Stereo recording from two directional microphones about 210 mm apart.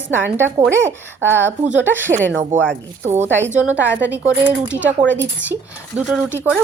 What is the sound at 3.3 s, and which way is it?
Speech, 60° right (ahead or behind).